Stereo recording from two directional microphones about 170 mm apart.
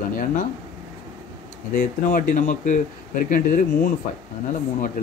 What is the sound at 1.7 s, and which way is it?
Speech, 55° left (ahead or behind).